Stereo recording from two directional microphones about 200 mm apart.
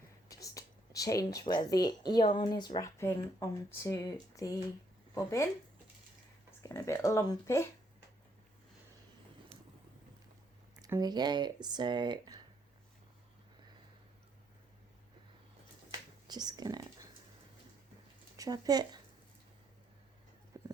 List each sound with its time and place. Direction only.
0.3 s speech: 15° left (ahead or behind)
6.6 s speech: 15° left (ahead or behind)
10.8 s speech: 15° right (ahead or behind)
15.9 s whispering: 20° right (ahead or behind)
18.3 s speech: 20° right (ahead or behind)